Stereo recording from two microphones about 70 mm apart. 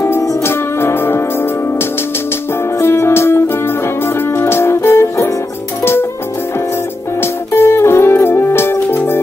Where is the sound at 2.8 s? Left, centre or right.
Left.